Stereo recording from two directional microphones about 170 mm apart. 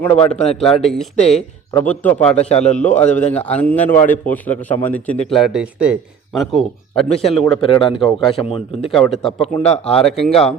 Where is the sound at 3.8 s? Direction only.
50° left (ahead or behind).